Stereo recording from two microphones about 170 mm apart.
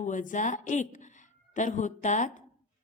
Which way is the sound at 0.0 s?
50° left (ahead or behind).